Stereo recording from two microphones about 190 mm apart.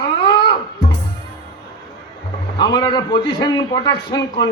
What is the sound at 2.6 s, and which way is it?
A man's voice, 20° left (ahead or behind).